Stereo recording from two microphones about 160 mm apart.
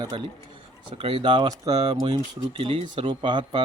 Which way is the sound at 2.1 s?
35° right (ahead or behind).